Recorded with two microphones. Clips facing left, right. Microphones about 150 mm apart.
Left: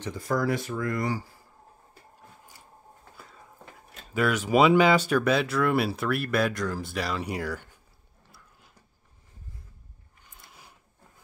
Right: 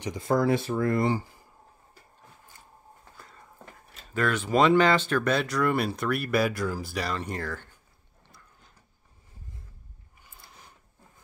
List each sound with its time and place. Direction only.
0.0 s speech: 20° right (ahead or behind)
4.1 s speech: 10° left (ahead or behind)
8.2 s gears: 5° left (ahead or behind)
10.2 s a sound: centre (ahead or behind)